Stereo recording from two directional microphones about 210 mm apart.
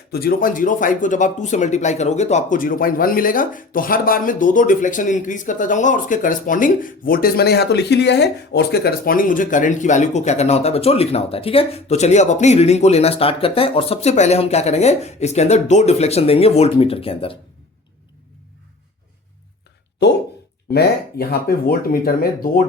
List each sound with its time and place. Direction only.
0.1 s speech: 45° left (ahead or behind); by 17.3 s 25° left (ahead or behind)
20.0 s speech: 55° left (ahead or behind)